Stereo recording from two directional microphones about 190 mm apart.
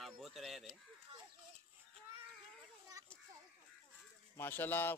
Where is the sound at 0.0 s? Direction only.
Centre (ahead or behind).